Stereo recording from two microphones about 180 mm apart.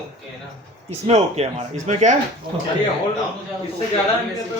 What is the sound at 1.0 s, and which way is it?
Speech, 35° right (ahead or behind).